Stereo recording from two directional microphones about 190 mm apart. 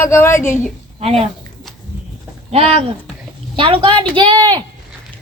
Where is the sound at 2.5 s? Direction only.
30° right (ahead or behind).